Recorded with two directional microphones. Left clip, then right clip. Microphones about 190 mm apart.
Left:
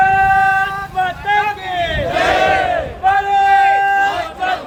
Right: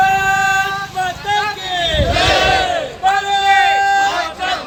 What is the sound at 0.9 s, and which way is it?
Vehicle, 40° right (ahead or behind).